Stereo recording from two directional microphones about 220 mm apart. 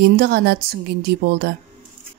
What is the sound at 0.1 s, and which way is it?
Speech, 45° right (ahead or behind).